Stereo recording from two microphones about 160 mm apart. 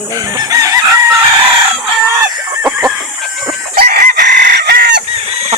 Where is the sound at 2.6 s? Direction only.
5° right (ahead or behind).